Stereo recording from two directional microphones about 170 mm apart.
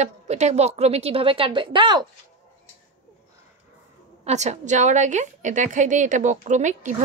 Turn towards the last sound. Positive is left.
turn(degrees=-45)  # may be behind; listen again after turning